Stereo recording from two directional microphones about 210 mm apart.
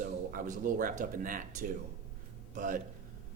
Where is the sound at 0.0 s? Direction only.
40° right (ahead or behind).